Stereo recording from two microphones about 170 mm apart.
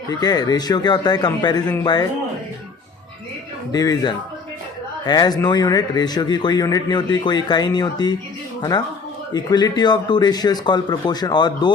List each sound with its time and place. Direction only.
0.1 s a man's voice: 25° left (ahead or behind)
3.7 s a man's voice: 20° left (ahead or behind)
9.3 s a man's voice: 25° left (ahead or behind)